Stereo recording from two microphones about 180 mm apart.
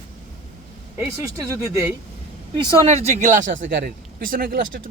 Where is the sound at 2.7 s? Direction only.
30° right (ahead or behind).